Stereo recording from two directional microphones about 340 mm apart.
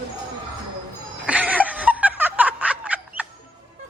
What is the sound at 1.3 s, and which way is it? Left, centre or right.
Snicker, centre.